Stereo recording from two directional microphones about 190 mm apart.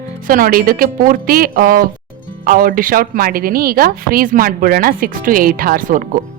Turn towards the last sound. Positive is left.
turn(degrees=-45)  # may be behind; listen again after turning